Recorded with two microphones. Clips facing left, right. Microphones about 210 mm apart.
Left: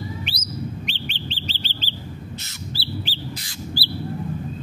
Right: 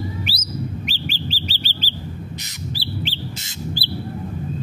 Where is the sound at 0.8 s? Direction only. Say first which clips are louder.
Right 4 dB; 5° right (ahead or behind).